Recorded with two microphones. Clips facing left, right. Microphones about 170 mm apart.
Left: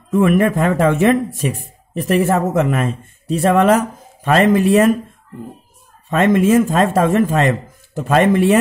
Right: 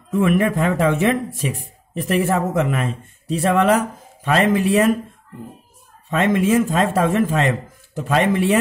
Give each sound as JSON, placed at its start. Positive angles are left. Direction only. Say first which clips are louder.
{"t": 0.1, "sound": "a man's voice", "louder": "left 4 dB", "side_deg": 45}
{"t": 6.0, "sound": "a man's voice", "louder": "left 4 dB", "side_deg": 50}